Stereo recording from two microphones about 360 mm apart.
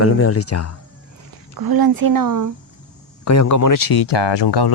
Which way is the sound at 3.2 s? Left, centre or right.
Left.